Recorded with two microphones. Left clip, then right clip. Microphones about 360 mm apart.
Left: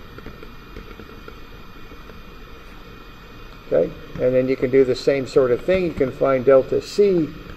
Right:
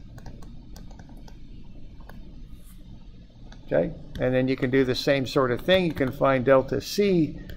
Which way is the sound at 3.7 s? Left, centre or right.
Right.